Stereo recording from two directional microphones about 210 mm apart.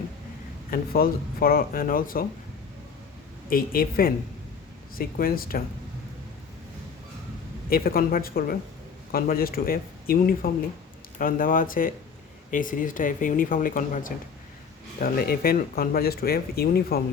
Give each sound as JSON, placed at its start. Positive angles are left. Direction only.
{"t": 0.7, "sound": "speech", "side_deg": 45}
{"t": 3.5, "sound": "speech", "side_deg": 45}
{"t": 7.7, "sound": "speech", "side_deg": 45}